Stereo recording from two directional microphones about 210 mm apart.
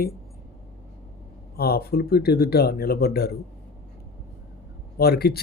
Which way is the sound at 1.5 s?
45° left (ahead or behind).